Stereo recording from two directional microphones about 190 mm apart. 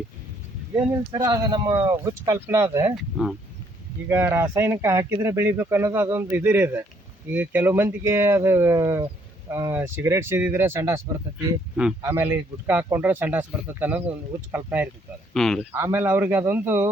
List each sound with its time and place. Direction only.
1.1 s speech: 20° right (ahead or behind)
2.9 s speech: 5° right (ahead or behind)
4.1 s speech: 15° right (ahead or behind)
15.3 s speech: centre (ahead or behind)
15.7 s speech: 15° right (ahead or behind)